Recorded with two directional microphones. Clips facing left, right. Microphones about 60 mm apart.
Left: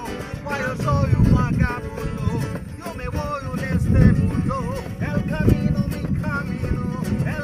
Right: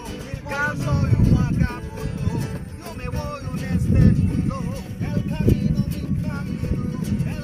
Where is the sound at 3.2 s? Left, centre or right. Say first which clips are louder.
Left 5 dB; left.